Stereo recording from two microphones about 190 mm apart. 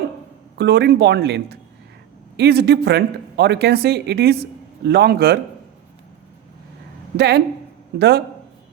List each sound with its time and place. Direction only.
0.5 s speech: 60° right (ahead or behind)
7.2 s speech: 60° right (ahead or behind)